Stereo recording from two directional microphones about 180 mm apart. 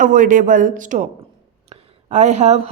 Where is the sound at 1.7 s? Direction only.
40° right (ahead or behind).